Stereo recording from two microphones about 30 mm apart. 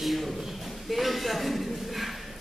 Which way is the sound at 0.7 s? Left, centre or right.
Centre.